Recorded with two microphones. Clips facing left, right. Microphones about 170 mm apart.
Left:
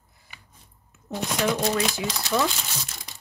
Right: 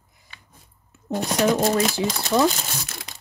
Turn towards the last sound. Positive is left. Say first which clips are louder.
# right 4 dB
turn(degrees=-70)  # may be behind; listen again after turning